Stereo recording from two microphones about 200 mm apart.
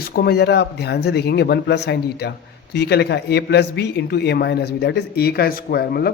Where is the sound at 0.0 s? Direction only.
50° left (ahead or behind).